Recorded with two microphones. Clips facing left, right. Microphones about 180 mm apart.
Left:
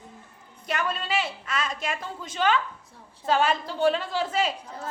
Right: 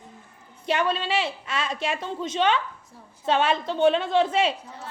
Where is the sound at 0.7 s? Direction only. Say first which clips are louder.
Right 4 dB; 25° right (ahead or behind).